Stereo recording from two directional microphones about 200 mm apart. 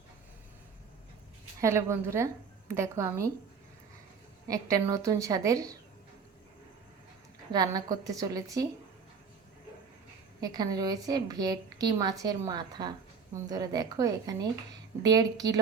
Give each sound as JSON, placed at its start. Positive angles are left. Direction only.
{"t": 1.6, "sound": "a woman's voice", "side_deg": -15}
{"t": 4.4, "sound": "a woman's voice", "side_deg": -15}
{"t": 7.5, "sound": "a woman's voice", "side_deg": -20}
{"t": 10.4, "sound": "a woman's voice", "side_deg": -20}